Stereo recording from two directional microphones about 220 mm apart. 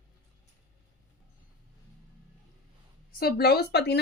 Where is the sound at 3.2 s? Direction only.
45° left (ahead or behind).